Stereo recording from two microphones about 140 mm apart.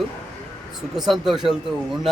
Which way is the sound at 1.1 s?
Centre (ahead or behind).